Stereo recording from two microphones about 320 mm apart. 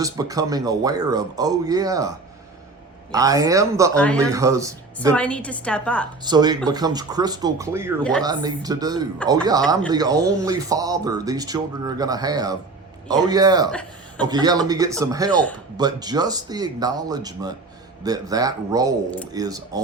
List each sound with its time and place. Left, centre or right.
0.0 s speech: centre
3.9 s a woman's voice: centre
4.3 s speech: centre
5.1 s a woman's voice: centre
6.2 s speech: centre